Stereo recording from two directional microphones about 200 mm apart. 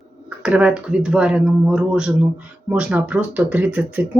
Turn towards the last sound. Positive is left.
turn(degrees=-10)  # may be behind; listen again after turning